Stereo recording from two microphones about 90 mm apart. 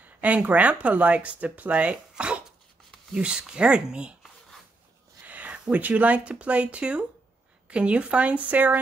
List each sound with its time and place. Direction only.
0.0 s speech: 15° right (ahead or behind)
5.2 s speech: 15° right (ahead or behind)